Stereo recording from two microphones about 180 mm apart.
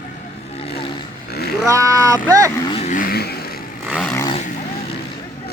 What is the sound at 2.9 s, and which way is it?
Vehicle, 50° left (ahead or behind).